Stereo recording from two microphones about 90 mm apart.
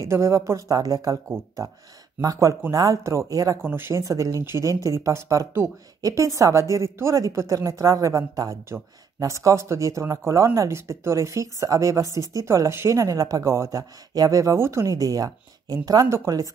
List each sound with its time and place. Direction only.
0.0 s speech: 30° right (ahead or behind)
2.2 s speech: 35° right (ahead or behind)
3.6 s speech: 25° right (ahead or behind)
4.0 s speech: 40° right (ahead or behind)